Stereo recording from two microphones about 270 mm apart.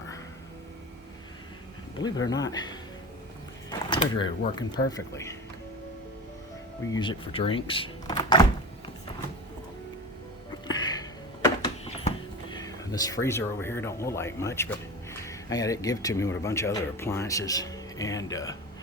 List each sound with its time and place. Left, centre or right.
2.2 s speech: centre
3.7 s a sound: centre
4.9 s speech: centre
6.9 s speech: centre
10.7 s music: centre
11.4 s a sound: centre
15.3 s speech: centre